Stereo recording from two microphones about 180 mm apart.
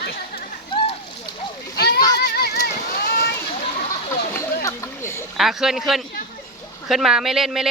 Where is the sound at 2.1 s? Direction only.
65° left (ahead or behind).